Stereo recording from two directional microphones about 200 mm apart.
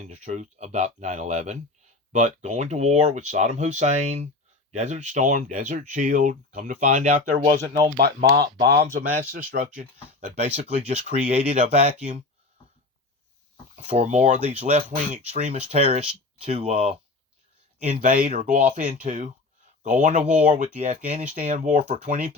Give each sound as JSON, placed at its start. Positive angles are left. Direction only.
{"t": 0.0, "sound": "speech", "side_deg": -35}
{"t": 7.9, "sound": "speech", "side_deg": -50}
{"t": 13.7, "sound": "speech", "side_deg": -35}
{"t": 18.0, "sound": "speech", "side_deg": -40}